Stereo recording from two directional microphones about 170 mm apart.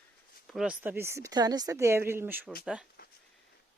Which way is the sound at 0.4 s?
5° right (ahead or behind).